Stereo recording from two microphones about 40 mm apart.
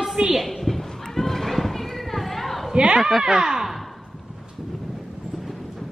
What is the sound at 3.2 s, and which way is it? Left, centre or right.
Speech, centre.